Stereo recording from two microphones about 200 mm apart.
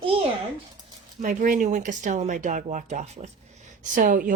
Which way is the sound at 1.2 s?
40° right (ahead or behind).